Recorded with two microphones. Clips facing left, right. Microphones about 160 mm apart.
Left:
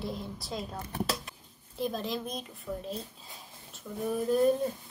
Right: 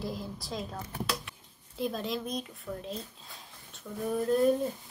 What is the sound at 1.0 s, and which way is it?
Speech, 40° left (ahead or behind).